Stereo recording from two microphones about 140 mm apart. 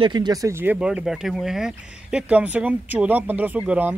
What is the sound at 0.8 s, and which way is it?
Speech, 5° right (ahead or behind).